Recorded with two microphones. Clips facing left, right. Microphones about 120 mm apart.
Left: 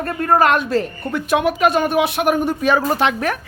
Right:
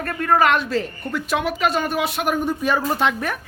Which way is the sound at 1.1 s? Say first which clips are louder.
Left 5 dB; 55° left (ahead or behind).